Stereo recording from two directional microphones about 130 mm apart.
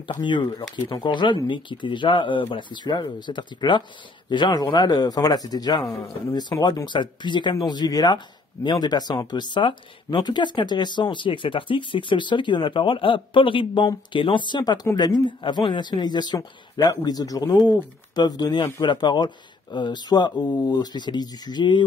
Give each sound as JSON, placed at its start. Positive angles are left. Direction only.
{"t": 0.0, "sound": "speech", "side_deg": 35}